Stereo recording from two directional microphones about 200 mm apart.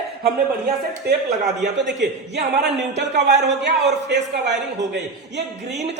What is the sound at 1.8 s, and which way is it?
A man's voice, 60° right (ahead or behind).